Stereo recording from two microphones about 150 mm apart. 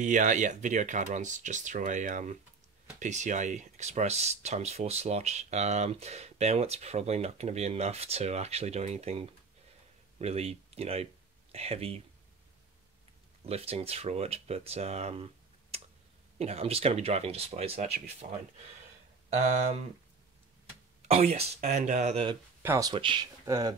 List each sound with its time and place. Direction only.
0.0 s speech: 55° right (ahead or behind); by 12.0 s 40° right (ahead or behind)
13.5 s speech: 40° right (ahead or behind)
16.3 s speech: 40° right (ahead or behind)
19.3 s speech: 50° right (ahead or behind)
21.1 s speech: 45° right (ahead or behind)
22.6 s speech: 15° right (ahead or behind)
22.8 s speech: 35° right (ahead or behind)